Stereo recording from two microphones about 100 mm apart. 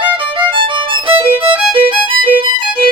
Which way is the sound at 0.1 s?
55° right (ahead or behind).